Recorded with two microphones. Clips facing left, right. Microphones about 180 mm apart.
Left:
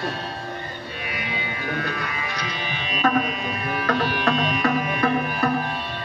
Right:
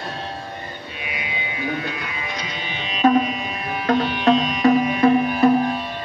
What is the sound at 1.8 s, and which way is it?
Music, 20° right (ahead or behind).